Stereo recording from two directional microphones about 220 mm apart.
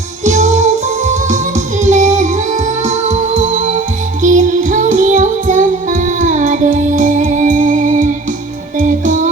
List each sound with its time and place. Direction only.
0.3 s music: 35° right (ahead or behind)